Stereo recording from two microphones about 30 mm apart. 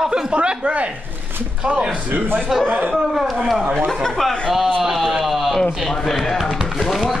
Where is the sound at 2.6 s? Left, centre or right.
Right.